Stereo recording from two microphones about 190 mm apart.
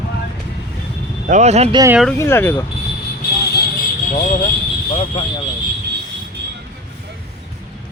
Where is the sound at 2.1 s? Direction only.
15° left (ahead or behind).